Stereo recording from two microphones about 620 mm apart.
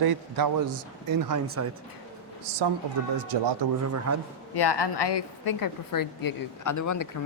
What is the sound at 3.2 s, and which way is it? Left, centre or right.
Speech, right.